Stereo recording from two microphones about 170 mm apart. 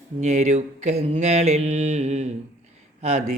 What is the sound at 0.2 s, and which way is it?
Mantra, 45° right (ahead or behind).